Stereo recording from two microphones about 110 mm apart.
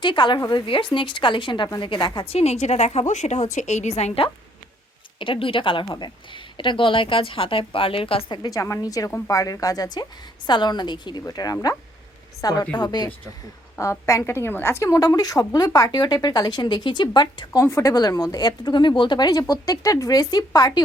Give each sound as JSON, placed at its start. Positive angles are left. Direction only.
{"t": 0.0, "sound": "a woman's voice", "side_deg": 45}
{"t": 5.2, "sound": "a woman's voice", "side_deg": 55}
{"t": 13.7, "sound": "a woman's voice", "side_deg": 25}